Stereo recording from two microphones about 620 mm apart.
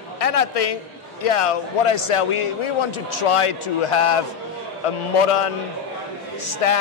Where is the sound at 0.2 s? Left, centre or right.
Left.